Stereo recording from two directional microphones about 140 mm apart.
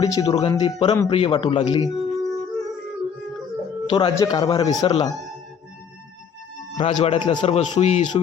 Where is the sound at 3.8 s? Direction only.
30° left (ahead or behind).